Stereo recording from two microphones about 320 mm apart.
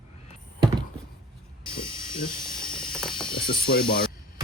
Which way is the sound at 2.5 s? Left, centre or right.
Centre.